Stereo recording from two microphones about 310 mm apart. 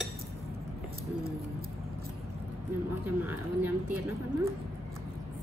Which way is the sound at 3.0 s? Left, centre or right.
Centre.